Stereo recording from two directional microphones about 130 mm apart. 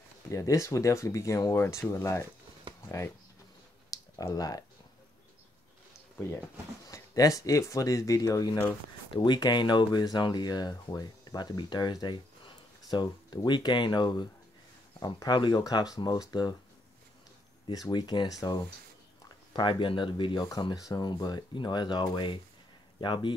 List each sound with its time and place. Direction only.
0.3 s speech: 25° left (ahead or behind)
2.7 s a sound: 40° right (ahead or behind)
3.9 s a sound: 25° left (ahead or behind)
6.9 s speech: 25° left (ahead or behind)
17.6 s speech: 35° left (ahead or behind)
20.6 s speech: 30° left (ahead or behind)